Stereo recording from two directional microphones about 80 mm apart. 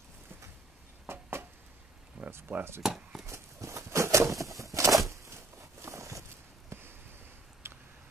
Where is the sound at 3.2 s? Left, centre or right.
Right.